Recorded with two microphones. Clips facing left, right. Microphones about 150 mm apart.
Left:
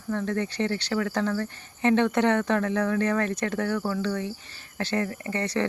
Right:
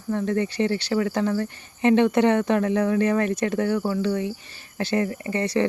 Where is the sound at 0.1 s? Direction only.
15° right (ahead or behind).